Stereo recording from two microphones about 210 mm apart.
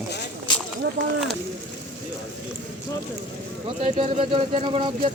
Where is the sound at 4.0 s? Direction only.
25° right (ahead or behind).